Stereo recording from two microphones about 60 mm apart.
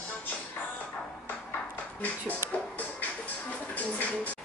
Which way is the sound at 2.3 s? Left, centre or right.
Right.